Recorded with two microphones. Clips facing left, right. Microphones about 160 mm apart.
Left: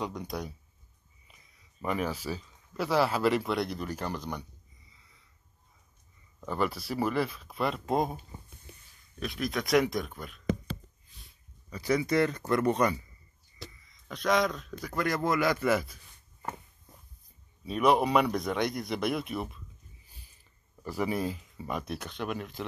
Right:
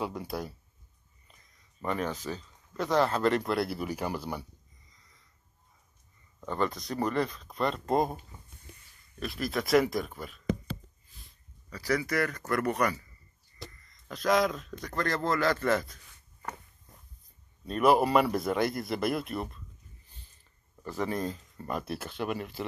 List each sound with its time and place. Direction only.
0.0 s a man's voice: 5° right (ahead or behind)
1.2 s speech: 10° left (ahead or behind); by 4.5 s 5° right (ahead or behind)
4.8 s sniff: 10° left (ahead or behind)
6.4 s a man's voice: 5° left (ahead or behind)
9.2 s a man's voice: centre (ahead or behind)
11.1 s a sound: centre (ahead or behind)
11.7 s speech: 20° left (ahead or behind)
13.7 s a man's voice: centre (ahead or behind)
17.6 s a man's voice: centre (ahead or behind)
20.8 s a man's voice: 10° left (ahead or behind); by 22.7 s 5° right (ahead or behind)